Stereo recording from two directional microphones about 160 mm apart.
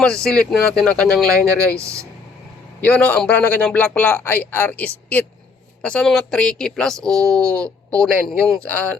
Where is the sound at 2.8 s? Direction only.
10° left (ahead or behind).